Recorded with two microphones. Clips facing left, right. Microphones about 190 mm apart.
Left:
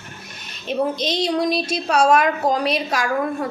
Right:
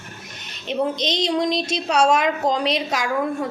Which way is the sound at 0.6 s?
20° right (ahead or behind).